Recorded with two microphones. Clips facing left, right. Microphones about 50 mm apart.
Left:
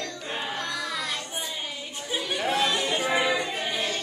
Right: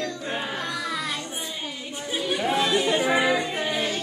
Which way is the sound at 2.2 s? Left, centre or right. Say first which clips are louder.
Right 2 dB; centre.